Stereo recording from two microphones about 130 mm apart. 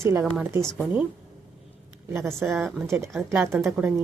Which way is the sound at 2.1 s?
20° right (ahead or behind).